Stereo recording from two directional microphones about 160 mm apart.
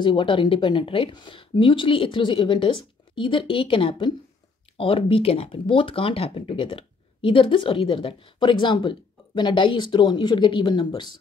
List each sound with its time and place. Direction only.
0.0 s speech: 30° left (ahead or behind)